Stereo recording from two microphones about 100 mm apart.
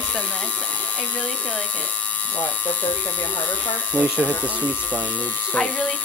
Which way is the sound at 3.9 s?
15° left (ahead or behind).